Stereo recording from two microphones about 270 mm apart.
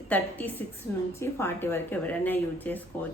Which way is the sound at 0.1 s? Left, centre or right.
Centre.